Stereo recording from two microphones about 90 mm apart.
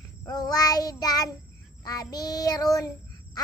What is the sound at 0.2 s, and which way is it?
Child singing, 45° left (ahead or behind).